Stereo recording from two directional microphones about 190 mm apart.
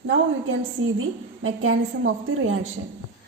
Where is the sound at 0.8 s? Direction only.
90° right.